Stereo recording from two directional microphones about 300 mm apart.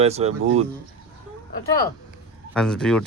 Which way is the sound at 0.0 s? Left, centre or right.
Right.